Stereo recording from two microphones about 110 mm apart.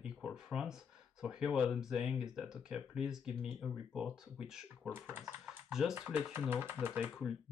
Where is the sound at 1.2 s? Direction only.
5° right (ahead or behind).